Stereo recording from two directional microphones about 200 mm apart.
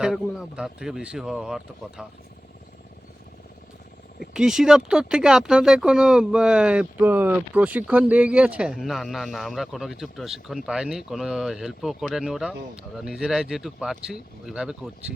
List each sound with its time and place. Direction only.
0.0 s speech: centre (ahead or behind)
4.2 s speech: centre (ahead or behind)